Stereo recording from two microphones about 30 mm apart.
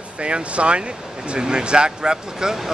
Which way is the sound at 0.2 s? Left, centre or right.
Right.